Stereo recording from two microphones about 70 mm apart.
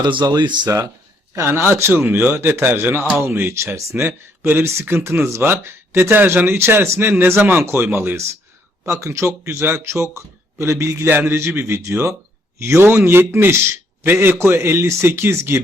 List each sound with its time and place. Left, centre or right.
0.0 s speech: right
1.4 s speech: right